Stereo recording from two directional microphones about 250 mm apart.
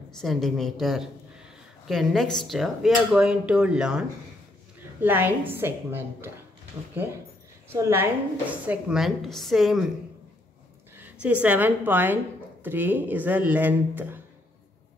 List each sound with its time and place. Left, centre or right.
0.2 s a woman's voice: centre
5.0 s speech: centre
7.7 s a woman's voice: centre
11.0 s a sound: centre
11.4 s speech: centre